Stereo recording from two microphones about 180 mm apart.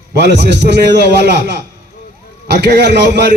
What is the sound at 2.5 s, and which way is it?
Speech, 65° right (ahead or behind).